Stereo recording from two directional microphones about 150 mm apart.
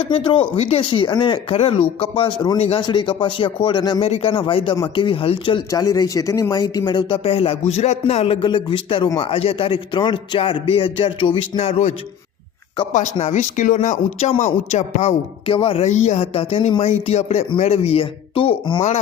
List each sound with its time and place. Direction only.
0.0 s a man's voice: 35° left (ahead or behind)
5.7 s a man's voice: 25° left (ahead or behind); by 11.9 s 45° left (ahead or behind)
12.9 s a man's voice: 55° left (ahead or behind); by 18.8 s 35° left (ahead or behind)